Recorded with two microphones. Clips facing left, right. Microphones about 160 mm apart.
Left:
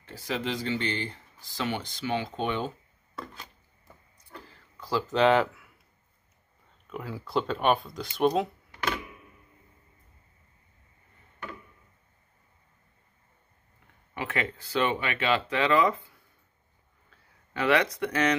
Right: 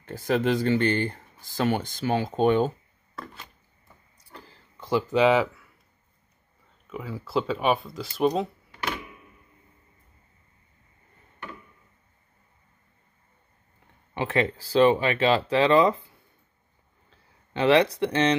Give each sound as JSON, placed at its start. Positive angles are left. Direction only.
{"t": 0.0, "sound": "speech", "side_deg": -50}
{"t": 4.5, "sound": "a sound", "side_deg": -20}
{"t": 6.9, "sound": "speech", "side_deg": 0}
{"t": 14.1, "sound": "speech", "side_deg": -30}
{"t": 17.1, "sound": "speech", "side_deg": -30}